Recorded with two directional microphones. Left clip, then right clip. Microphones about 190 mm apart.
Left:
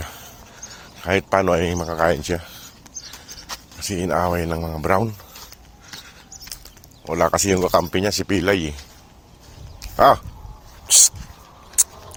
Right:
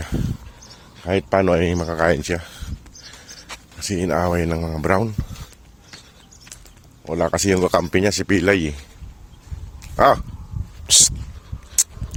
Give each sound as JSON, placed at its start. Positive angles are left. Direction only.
{"t": 0.0, "sound": "a sound", "side_deg": -40}
{"t": 1.0, "sound": "speech", "side_deg": -30}
{"t": 3.8, "sound": "speech", "side_deg": -40}
{"t": 7.1, "sound": "speech", "side_deg": -30}
{"t": 10.0, "sound": "speech", "side_deg": -45}
{"t": 11.8, "sound": "a sound", "side_deg": -50}